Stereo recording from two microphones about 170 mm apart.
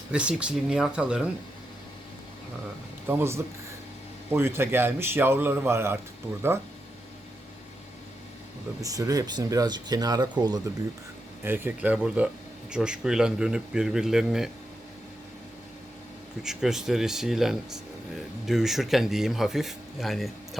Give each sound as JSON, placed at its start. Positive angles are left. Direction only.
{"t": 0.1, "sound": "speech", "side_deg": -5}
{"t": 3.1, "sound": "speech", "side_deg": -15}
{"t": 8.8, "sound": "speech", "side_deg": -20}
{"t": 11.4, "sound": "speech", "side_deg": -10}
{"t": 16.4, "sound": "speech", "side_deg": -5}